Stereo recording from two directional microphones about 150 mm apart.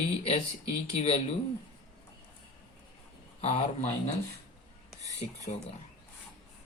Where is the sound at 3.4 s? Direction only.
45° left (ahead or behind).